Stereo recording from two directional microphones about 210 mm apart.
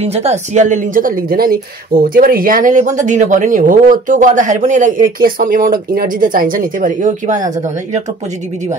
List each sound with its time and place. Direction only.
0.0 s speech: 30° right (ahead or behind)